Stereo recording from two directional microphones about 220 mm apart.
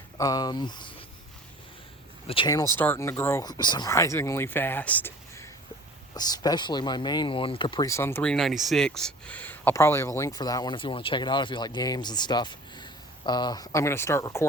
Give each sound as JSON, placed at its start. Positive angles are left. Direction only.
{"t": 0.2, "sound": "speech", "side_deg": 15}
{"t": 2.2, "sound": "speech", "side_deg": 25}